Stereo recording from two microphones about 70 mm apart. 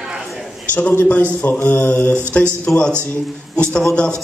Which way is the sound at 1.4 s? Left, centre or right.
Left.